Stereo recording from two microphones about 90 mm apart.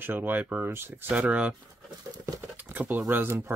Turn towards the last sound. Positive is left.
turn(degrees=-25)  # may be behind; listen again after turning